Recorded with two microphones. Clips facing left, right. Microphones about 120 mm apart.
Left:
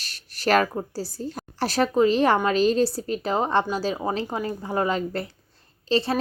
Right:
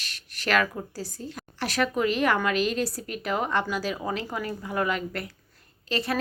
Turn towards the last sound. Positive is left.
turn(degrees=30)  # may be behind; listen again after turning